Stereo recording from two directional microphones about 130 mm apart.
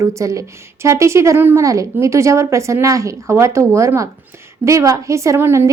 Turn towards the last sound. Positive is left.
turn(degrees=-20)  # may be behind; listen again after turning